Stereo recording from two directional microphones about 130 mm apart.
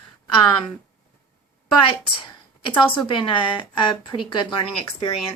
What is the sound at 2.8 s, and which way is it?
A woman's voice, 40° left (ahead or behind).